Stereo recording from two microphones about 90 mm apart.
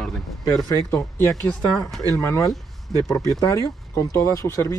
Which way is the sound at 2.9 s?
5° left (ahead or behind).